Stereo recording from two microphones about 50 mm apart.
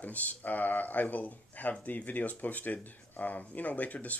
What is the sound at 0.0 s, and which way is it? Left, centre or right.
Speech, left.